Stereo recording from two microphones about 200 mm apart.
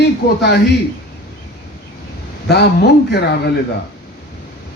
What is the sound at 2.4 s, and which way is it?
Speech, 55° left (ahead or behind).